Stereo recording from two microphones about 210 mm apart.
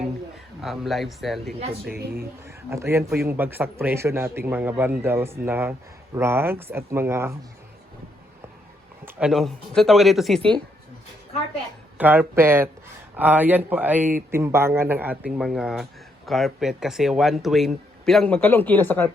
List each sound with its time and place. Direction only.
0.6 s speech: centre (ahead or behind)
1.9 s a woman's voice: 50° right (ahead or behind)
2.5 s a man's voice: 15° right (ahead or behind)
9.0 s speech: 5° right (ahead or behind)
11.9 s a man's voice: 10° right (ahead or behind); by 19.1 s 10° left (ahead or behind)